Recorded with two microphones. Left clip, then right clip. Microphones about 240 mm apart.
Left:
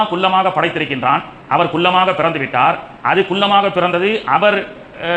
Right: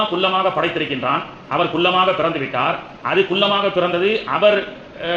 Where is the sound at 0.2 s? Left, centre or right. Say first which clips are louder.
Left 4 dB; left.